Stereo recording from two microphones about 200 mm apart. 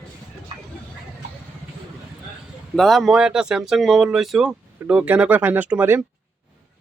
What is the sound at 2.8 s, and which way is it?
Speech, centre (ahead or behind).